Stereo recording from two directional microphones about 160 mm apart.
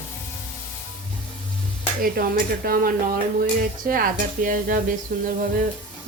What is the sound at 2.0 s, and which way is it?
Speech, 65° right (ahead or behind).